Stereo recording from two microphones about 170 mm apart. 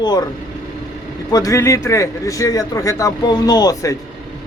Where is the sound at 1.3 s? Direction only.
20° left (ahead or behind).